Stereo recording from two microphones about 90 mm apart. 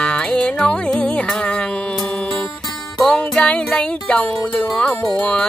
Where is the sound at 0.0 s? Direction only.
10° left (ahead or behind).